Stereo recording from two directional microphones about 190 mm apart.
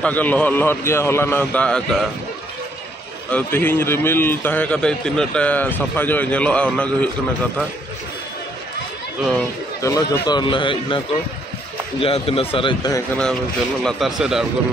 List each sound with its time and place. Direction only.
0.0 s a man's voice: 10° left (ahead or behind)
3.3 s a man's voice: 10° left (ahead or behind)
9.8 s a man's voice: 15° left (ahead or behind)
12.0 s a man's voice: 30° left (ahead or behind)
13.8 s speech: centre (ahead or behind)